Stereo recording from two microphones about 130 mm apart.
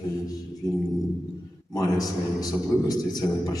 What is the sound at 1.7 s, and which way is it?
A man's voice, 30° left (ahead or behind).